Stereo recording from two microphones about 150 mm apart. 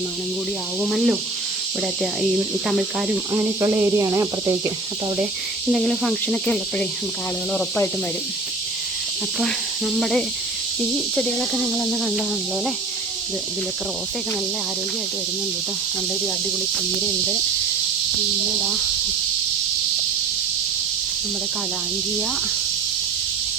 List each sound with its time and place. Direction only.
0.8 s speech: centre (ahead or behind)
3.6 s speech: 20° right (ahead or behind)
5.7 s speech: centre (ahead or behind)
9.4 s speech: centre (ahead or behind)